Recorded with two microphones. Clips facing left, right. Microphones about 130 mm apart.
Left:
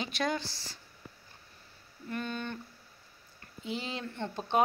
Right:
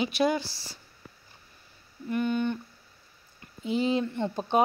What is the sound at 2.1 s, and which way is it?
Speech, 15° right (ahead or behind).